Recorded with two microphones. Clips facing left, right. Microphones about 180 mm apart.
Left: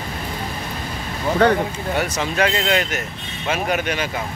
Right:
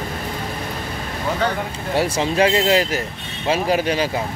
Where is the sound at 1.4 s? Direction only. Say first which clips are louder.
Left 8 dB; 60° left (ahead or behind).